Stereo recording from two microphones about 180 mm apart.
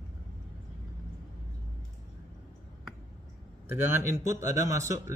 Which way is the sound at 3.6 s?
10° right (ahead or behind).